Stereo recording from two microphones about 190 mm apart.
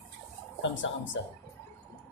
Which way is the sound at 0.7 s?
75° left (ahead or behind).